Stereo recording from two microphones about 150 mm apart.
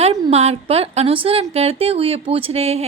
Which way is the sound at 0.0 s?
45° right (ahead or behind).